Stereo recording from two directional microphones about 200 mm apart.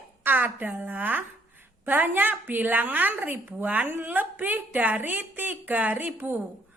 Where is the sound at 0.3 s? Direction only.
10° right (ahead or behind).